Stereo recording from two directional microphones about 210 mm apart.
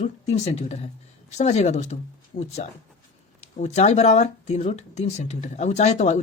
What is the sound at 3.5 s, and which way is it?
Speech, 35° left (ahead or behind).